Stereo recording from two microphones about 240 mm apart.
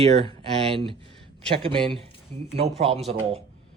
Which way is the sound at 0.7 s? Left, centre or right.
Right.